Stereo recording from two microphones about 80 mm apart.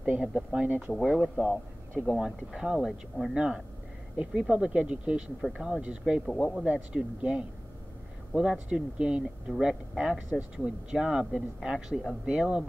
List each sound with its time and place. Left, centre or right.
0.0 s speech: centre
0.9 s speech: centre